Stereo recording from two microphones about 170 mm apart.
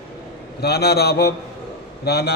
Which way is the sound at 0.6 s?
70° left (ahead or behind).